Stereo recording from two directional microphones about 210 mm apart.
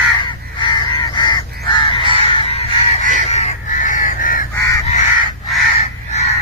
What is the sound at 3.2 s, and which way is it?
Goose, 30° left (ahead or behind).